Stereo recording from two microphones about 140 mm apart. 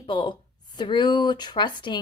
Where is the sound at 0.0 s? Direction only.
35° left (ahead or behind).